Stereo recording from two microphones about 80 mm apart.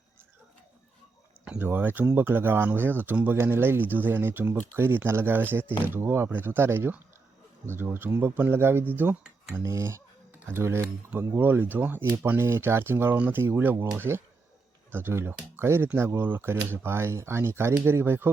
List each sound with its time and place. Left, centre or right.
1.5 s speech: right
9.6 s speech: right
10.4 s speech: right
13.1 s speech: centre
14.1 s speech: right